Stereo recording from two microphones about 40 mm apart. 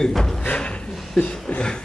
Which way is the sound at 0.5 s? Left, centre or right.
Left.